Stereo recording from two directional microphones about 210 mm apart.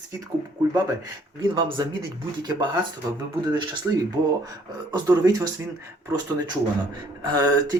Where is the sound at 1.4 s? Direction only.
20° right (ahead or behind).